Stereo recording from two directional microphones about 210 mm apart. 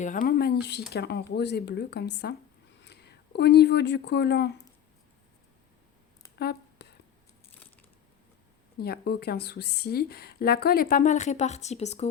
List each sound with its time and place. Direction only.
0.0 s speech: 40° left (ahead or behind)
6.4 s a sound: 50° left (ahead or behind)
8.8 s speech: 50° left (ahead or behind); by 12.0 s 30° left (ahead or behind)